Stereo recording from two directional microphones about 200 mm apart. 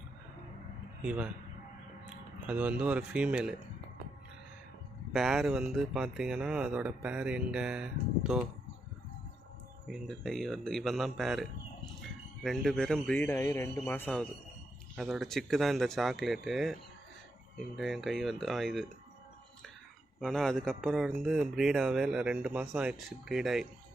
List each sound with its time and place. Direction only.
1.0 s speech: 5° right (ahead or behind)
2.5 s speech: 5° right (ahead or behind)
5.1 s speech: centre (ahead or behind)
9.8 s speech: centre (ahead or behind)
17.7 s speech: centre (ahead or behind)
20.1 s speech: centre (ahead or behind)